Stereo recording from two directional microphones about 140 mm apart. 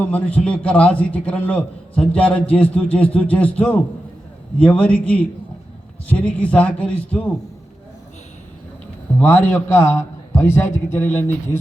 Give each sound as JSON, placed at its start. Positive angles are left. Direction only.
{"t": 0.0, "sound": "a man's voice", "side_deg": 10}
{"t": 9.1, "sound": "a man's voice", "side_deg": 15}